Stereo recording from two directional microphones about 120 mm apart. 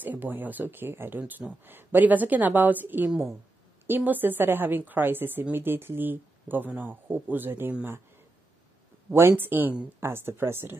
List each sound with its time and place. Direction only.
0.0 s a woman's voice: 15° right (ahead or behind)
9.1 s speech: 20° right (ahead or behind)